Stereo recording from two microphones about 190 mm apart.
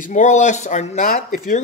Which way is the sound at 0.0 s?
40° left (ahead or behind).